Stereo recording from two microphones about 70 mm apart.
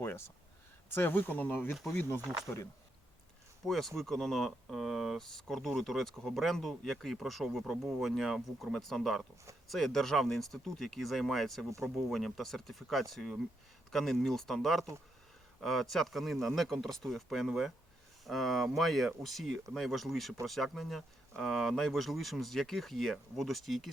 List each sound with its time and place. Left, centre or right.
0.9 s speech: left
3.7 s speech: centre